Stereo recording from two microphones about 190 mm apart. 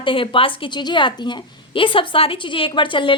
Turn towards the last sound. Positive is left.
turn(degrees=25)  # may be behind; listen again after turning